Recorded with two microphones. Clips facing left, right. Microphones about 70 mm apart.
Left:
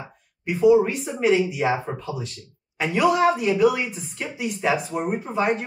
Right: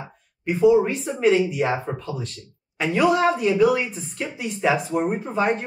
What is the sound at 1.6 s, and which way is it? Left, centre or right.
Speech, centre.